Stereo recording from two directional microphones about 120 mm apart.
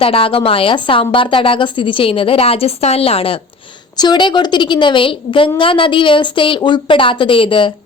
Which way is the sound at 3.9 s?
40° left (ahead or behind).